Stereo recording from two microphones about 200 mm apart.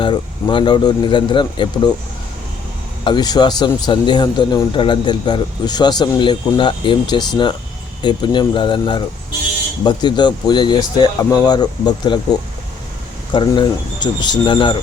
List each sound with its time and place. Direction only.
0.0 s speech: 25° left (ahead or behind)
3.0 s speech: 20° left (ahead or behind)